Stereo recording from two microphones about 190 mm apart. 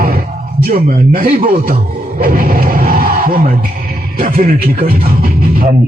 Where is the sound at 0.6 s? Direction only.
50° right (ahead or behind).